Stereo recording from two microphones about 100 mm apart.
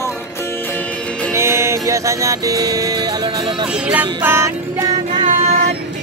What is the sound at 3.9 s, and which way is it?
Music, 15° right (ahead or behind).